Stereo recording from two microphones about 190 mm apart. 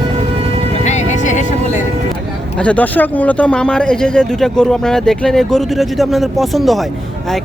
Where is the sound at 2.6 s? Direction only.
5° left (ahead or behind).